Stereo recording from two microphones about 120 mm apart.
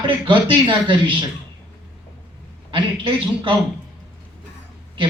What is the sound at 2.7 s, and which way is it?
Speech, 45° right (ahead or behind).